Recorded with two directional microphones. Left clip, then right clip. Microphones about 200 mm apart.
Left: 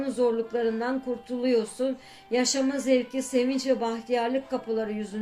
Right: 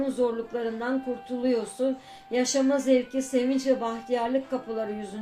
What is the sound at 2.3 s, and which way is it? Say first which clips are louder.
Speech: right 1 dB; 30° left (ahead or behind).